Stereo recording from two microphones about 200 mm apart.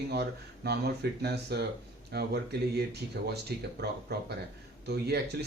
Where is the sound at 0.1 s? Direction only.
55° right (ahead or behind).